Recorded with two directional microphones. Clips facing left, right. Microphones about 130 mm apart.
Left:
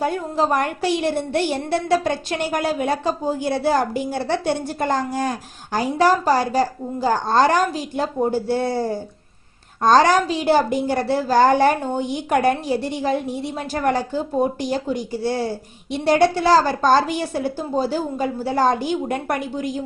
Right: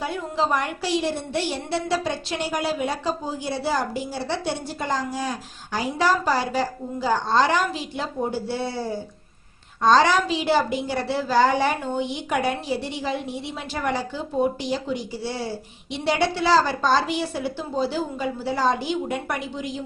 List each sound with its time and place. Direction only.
0.0 s a woman's voice: 50° left (ahead or behind)